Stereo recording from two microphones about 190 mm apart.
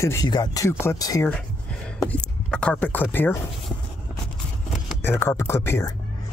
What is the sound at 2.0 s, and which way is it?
Speech, 5° left (ahead or behind).